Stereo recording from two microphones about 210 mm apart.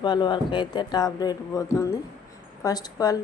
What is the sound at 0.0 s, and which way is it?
Speech, 20° left (ahead or behind).